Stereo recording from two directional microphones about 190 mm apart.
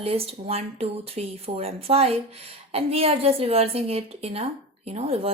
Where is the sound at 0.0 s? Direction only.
30° right (ahead or behind).